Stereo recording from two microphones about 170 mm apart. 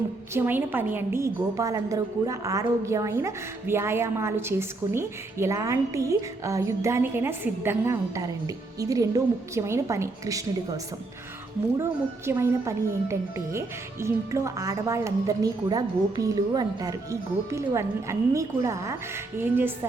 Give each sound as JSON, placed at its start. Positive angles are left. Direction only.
{"t": 0.3, "sound": "a woman's voice", "side_deg": -10}
{"t": 11.8, "sound": "a woman's voice", "side_deg": -15}